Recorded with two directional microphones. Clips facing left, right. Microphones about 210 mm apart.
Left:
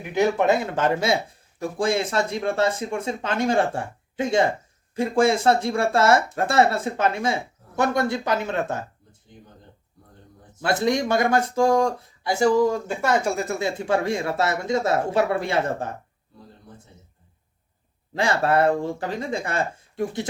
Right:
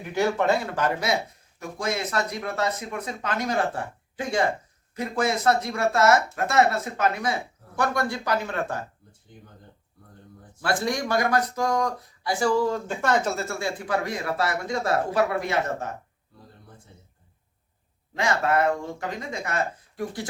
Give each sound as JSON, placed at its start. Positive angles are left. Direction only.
{"t": 0.0, "sound": "speech", "side_deg": 15}
{"t": 10.6, "sound": "speech", "side_deg": 20}
{"t": 18.1, "sound": "speech", "side_deg": 30}